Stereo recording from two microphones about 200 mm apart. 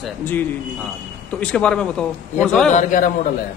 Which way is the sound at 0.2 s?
10° left (ahead or behind).